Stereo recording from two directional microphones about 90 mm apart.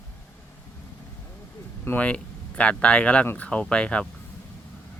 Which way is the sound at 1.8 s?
20° left (ahead or behind).